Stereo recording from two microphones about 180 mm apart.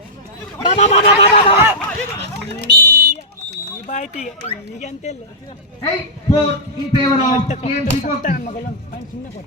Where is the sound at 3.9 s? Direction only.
40° left (ahead or behind).